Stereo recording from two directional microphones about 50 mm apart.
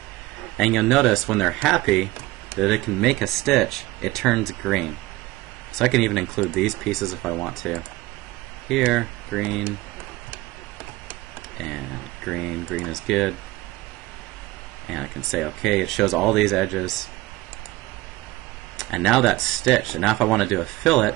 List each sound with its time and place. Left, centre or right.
0.6 s speech: centre
9.3 s speech: centre
11.5 s speech: centre
14.9 s speech: centre
18.8 s speech: centre